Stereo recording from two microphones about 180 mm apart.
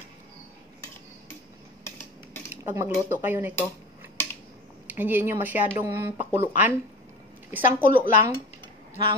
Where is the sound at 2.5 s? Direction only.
15° right (ahead or behind).